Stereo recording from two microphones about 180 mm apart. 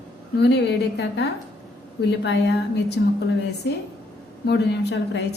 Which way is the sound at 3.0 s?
75° left (ahead or behind).